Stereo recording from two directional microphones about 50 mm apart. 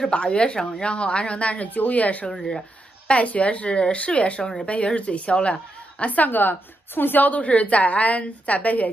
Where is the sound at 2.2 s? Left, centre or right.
Centre.